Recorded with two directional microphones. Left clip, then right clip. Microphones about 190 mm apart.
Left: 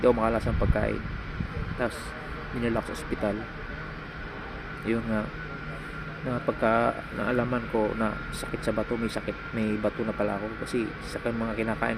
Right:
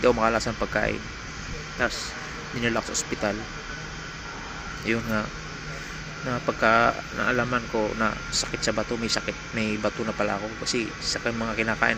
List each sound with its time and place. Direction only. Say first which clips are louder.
0.0 s speech: right 2 dB; centre (ahead or behind)
1.8 s a man's voice: right 5 dB; 10° left (ahead or behind)
4.9 s speech: right 3 dB; 5° left (ahead or behind)
6.3 s speech: right 4 dB; 5° right (ahead or behind)
7.7 s speech: right 2 dB; centre (ahead or behind)
8.7 s speech: left 2 dB; 5° right (ahead or behind)
9.0 s speech: right 4 dB; 5° left (ahead or behind)